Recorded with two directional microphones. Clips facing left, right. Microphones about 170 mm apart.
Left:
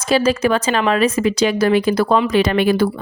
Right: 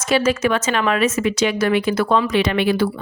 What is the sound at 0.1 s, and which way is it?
A woman's voice, 35° left (ahead or behind).